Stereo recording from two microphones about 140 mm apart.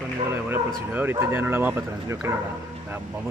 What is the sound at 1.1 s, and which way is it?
Speech, 15° right (ahead or behind).